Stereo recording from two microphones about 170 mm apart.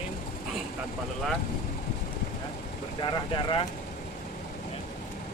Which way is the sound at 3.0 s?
30° left (ahead or behind).